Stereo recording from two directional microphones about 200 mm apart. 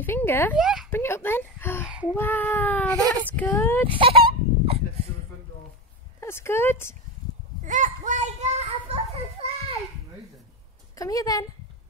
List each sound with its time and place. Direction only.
0.0 s speech: 10° left (ahead or behind)
0.6 s a sound: 5° right (ahead or behind)
0.8 s speech: 10° left (ahead or behind)
2.1 s baby cry: 10° left (ahead or behind)
3.3 s speech: 10° left (ahead or behind)
3.8 s a sound: 25° right (ahead or behind)
6.2 s speech: 10° left (ahead or behind)
7.6 s children playing: 40° right (ahead or behind)
11.0 s speech: 15° left (ahead or behind)